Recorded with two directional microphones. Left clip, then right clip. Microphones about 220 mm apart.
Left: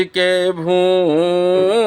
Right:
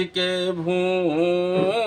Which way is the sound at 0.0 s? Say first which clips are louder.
Left 8 dB; 40° left (ahead or behind).